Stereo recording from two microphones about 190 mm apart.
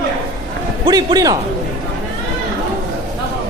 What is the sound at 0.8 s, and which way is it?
Speech, 20° right (ahead or behind).